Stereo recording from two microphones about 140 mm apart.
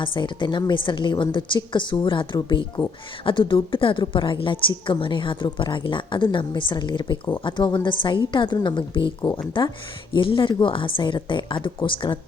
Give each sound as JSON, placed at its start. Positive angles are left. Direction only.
{"t": 0.0, "sound": "a woman's voice", "side_deg": 35}